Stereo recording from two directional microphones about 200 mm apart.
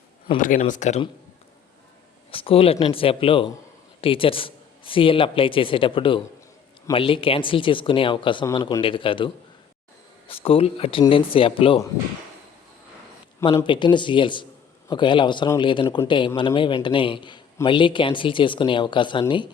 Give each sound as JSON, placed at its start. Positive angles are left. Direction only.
{"t": 0.3, "sound": "speech", "side_deg": 40}
{"t": 2.3, "sound": "a man's voice", "side_deg": 30}
{"t": 13.7, "sound": "a man's voice", "side_deg": 25}